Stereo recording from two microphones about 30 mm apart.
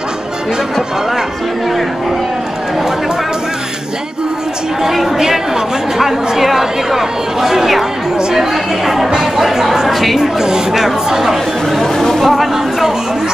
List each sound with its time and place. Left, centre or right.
4.9 s speech: centre
9.8 s a woman's voice: centre
10.1 s speech: centre
12.0 s music: centre
12.4 s a sound: centre